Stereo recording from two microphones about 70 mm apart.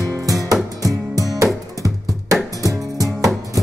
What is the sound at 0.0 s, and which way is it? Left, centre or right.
Music, right.